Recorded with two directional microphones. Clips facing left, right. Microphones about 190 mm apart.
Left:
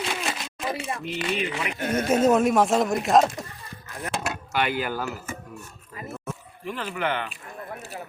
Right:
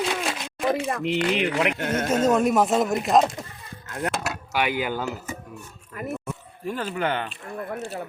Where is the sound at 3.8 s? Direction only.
70° right (ahead or behind).